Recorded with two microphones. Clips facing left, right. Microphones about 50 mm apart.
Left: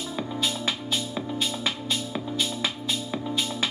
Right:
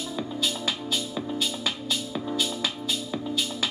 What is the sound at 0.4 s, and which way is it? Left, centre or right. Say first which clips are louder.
Music: left 1 dB; left.